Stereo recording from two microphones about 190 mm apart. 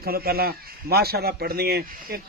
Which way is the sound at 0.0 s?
55° right (ahead or behind).